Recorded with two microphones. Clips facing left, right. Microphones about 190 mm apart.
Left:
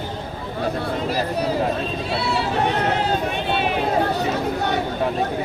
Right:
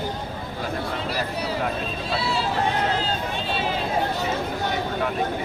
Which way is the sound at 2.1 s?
65° left (ahead or behind).